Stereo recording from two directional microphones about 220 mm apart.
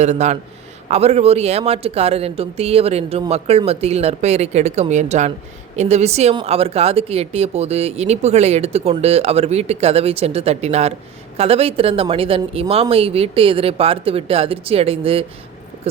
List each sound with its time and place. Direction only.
0.0 s a man's voice: 30° right (ahead or behind)